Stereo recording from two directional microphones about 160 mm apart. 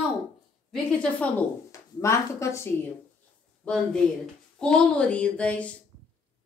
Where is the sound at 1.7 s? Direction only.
20° left (ahead or behind).